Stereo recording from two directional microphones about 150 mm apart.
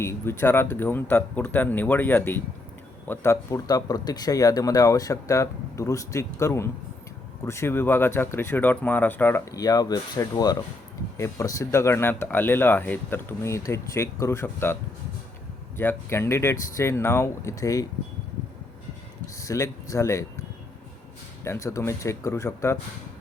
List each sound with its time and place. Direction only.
0.0 s speech: 15° left (ahead or behind)
15.8 s speech: 15° left (ahead or behind)
19.4 s speech: 20° left (ahead or behind)
21.4 s speech: 20° left (ahead or behind)